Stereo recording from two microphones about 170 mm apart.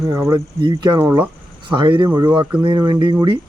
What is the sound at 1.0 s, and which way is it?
Speech, 10° right (ahead or behind).